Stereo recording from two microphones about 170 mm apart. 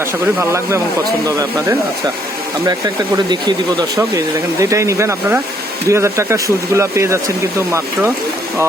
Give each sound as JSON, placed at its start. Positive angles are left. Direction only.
{"t": 0.3, "sound": "speech", "side_deg": -15}
{"t": 3.2, "sound": "speech", "side_deg": -25}